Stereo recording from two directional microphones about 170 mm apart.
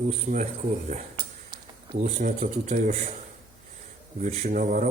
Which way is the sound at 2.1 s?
45° right (ahead or behind).